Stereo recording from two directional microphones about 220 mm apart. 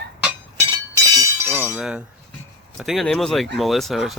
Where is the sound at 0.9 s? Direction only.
10° right (ahead or behind).